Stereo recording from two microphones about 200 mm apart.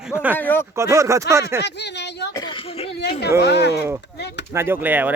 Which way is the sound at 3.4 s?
55° left (ahead or behind).